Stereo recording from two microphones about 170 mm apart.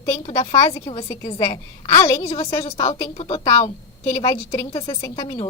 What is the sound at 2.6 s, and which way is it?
Speech, 35° left (ahead or behind).